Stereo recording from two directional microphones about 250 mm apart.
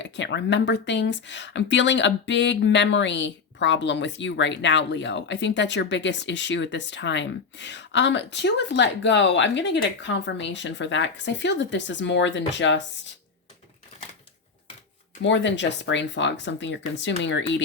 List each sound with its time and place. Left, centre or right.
0.0 s speech: left
15.2 s speech: left